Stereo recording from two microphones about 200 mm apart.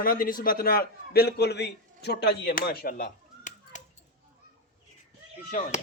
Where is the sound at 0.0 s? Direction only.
45° left (ahead or behind).